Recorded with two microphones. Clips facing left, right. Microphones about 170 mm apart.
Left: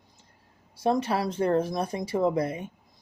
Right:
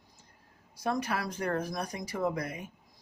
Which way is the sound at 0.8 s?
25° left (ahead or behind).